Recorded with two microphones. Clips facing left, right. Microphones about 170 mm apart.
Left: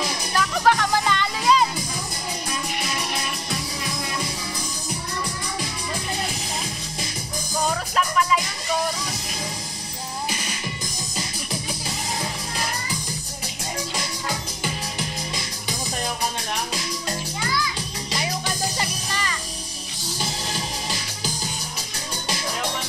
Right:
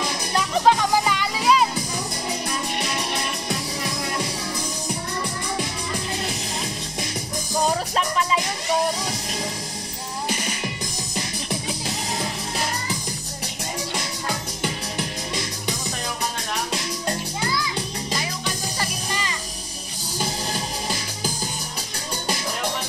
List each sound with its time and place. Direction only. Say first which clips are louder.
0.4 s music: right 1 dB; 15° right (ahead or behind)
7.6 s music: right 1 dB; 30° right (ahead or behind)